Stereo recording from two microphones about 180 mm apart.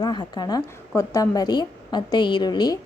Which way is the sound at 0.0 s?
25° left (ahead or behind).